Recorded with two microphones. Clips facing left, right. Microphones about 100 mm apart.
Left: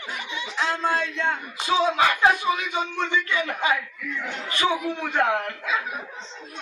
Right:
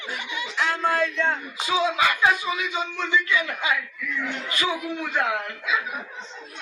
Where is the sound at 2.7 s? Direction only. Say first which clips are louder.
Even; 50° left (ahead or behind).